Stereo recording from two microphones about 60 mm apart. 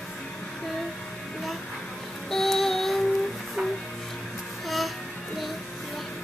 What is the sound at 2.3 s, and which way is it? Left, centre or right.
Music, centre.